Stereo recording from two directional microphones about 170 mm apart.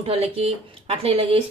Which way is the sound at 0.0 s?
35° right (ahead or behind).